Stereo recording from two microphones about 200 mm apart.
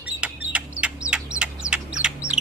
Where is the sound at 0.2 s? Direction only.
5° right (ahead or behind).